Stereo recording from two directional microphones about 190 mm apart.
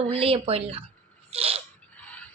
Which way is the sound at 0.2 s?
30° right (ahead or behind).